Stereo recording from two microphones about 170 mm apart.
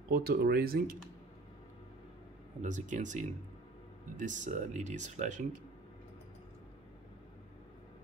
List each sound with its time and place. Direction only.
0.1 s speech: 65° right (ahead or behind)
2.6 s speech: 45° right (ahead or behind)